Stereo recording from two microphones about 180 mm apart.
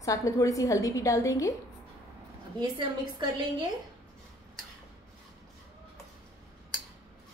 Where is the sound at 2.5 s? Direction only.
25° right (ahead or behind).